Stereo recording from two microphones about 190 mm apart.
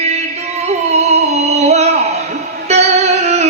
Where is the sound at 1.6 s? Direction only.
35° right (ahead or behind).